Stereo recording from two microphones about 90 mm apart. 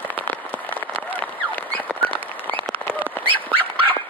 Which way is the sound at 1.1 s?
20° left (ahead or behind).